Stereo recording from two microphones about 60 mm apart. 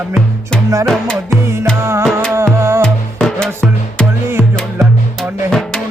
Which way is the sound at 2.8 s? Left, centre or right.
Centre.